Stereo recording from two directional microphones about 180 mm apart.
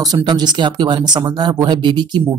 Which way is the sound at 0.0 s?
25° right (ahead or behind).